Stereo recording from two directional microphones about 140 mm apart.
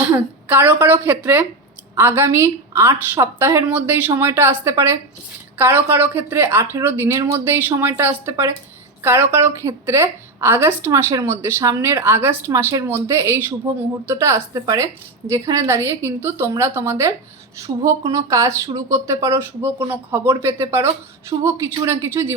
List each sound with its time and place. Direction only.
0.4 s speech: 15° right (ahead or behind)